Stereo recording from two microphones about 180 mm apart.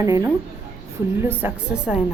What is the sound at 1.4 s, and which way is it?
Speech, 5° right (ahead or behind).